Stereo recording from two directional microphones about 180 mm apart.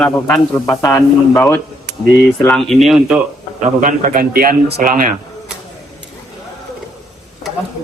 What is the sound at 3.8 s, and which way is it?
Speech, 50° right (ahead or behind).